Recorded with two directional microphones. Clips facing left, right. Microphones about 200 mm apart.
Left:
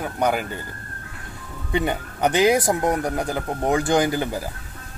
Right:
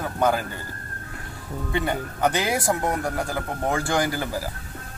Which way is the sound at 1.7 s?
20° left (ahead or behind).